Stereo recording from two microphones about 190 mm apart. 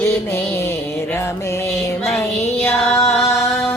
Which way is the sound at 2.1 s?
5° left (ahead or behind).